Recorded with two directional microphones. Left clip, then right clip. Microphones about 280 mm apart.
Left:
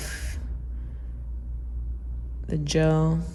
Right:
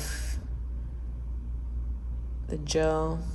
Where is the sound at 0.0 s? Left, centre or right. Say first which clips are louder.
Left 2 dB; left.